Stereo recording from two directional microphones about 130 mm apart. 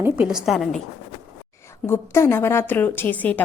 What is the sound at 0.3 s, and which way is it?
Speech, 5° right (ahead or behind).